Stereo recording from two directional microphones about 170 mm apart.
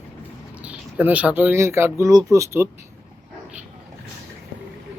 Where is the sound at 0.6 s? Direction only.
10° right (ahead or behind).